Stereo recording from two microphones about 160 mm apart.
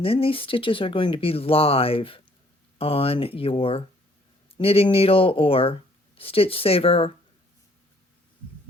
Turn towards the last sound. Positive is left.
turn(degrees=35)  # may be behind; listen again after turning